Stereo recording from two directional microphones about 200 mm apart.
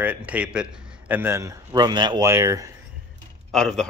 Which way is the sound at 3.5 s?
Centre (ahead or behind).